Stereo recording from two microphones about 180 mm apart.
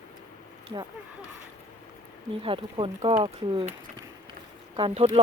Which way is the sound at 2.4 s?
30° right (ahead or behind).